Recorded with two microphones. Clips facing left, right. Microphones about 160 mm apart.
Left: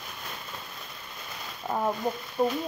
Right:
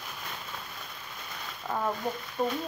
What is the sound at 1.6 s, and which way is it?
Speech, 20° left (ahead or behind).